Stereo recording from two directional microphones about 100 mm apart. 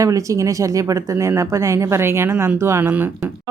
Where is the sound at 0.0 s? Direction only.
35° right (ahead or behind).